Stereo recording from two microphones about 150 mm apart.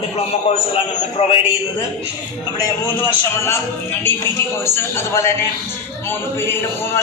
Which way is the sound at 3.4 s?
15° left (ahead or behind).